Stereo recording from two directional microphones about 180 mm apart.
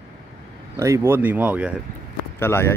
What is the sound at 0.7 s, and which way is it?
Speech, 15° right (ahead or behind).